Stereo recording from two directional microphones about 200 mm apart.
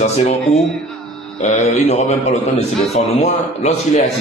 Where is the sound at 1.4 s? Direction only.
35° left (ahead or behind).